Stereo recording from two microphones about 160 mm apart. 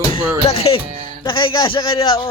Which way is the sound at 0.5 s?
40° left (ahead or behind).